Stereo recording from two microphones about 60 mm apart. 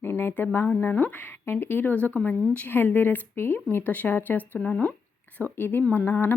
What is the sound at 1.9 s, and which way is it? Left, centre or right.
Speech, left.